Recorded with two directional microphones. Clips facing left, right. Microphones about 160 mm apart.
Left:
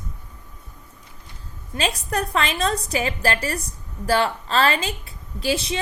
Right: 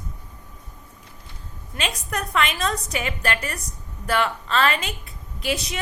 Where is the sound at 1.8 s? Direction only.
30° left (ahead or behind).